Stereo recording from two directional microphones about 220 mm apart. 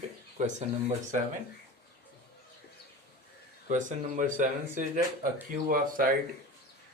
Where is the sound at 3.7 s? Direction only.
35° right (ahead or behind).